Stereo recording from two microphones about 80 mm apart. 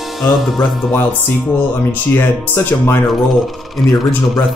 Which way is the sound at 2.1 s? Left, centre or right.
Left.